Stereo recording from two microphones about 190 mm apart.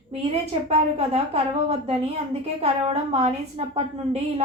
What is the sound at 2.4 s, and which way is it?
A woman's voice, 30° right (ahead or behind).